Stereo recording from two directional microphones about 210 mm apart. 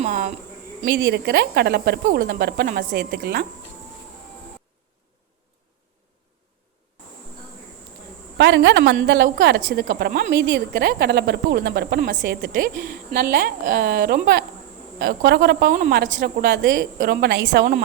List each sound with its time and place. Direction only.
0.0 s cricket: 35° right (ahead or behind)
0.9 s a woman's voice: 50° right (ahead or behind)
8.4 s a woman's voice: 55° right (ahead or behind)
9.6 s a woman's voice: 40° right (ahead or behind)